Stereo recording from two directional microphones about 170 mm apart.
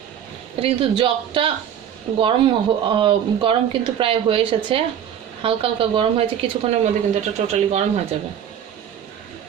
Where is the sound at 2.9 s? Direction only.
30° right (ahead or behind).